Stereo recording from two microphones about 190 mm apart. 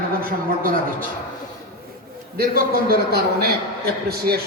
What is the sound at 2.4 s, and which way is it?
A man's voice, 50° right (ahead or behind).